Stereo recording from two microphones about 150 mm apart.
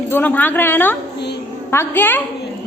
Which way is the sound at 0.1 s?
10° left (ahead or behind).